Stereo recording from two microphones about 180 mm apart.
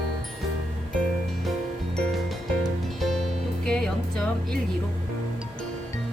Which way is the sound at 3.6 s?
5° left (ahead or behind).